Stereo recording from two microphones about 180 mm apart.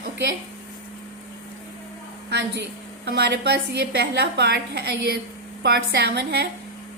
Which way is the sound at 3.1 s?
70° right (ahead or behind).